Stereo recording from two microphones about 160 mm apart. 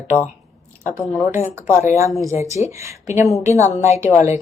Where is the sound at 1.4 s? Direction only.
15° right (ahead or behind).